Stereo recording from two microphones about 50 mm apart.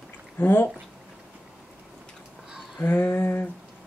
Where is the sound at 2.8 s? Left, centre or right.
Left.